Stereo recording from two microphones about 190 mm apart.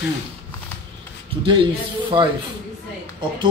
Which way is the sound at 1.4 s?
25° right (ahead or behind).